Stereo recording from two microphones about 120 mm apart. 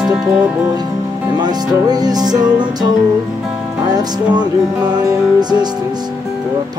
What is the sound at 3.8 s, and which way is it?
Music, 35° right (ahead or behind).